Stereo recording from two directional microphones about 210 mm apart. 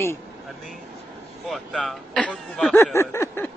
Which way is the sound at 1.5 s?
Centre (ahead or behind).